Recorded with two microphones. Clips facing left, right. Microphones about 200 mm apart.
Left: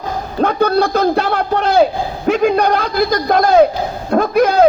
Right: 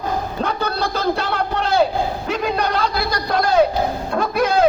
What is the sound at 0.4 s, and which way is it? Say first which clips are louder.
A man's voice: left 12 dB; 55° left (ahead or behind).